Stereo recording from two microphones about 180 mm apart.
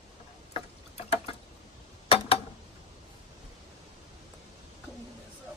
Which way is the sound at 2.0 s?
30° left (ahead or behind).